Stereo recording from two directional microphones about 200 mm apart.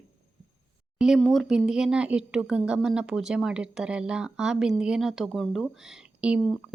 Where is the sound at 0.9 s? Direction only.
Centre (ahead or behind).